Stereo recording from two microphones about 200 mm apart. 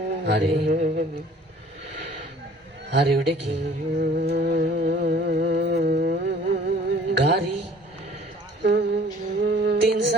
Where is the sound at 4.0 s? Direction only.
55° right (ahead or behind).